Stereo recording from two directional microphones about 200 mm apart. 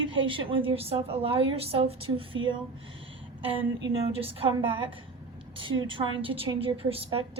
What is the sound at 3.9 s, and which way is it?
Speech, 30° right (ahead or behind).